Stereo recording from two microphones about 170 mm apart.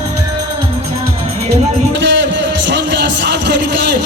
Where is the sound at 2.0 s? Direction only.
90° right.